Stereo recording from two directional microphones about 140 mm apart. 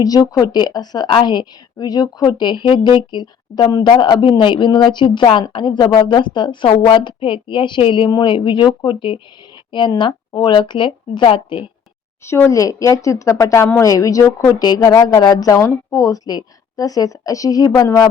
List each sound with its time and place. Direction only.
0.0 s a woman's voice: 25° left (ahead or behind)
12.2 s speech: 20° left (ahead or behind)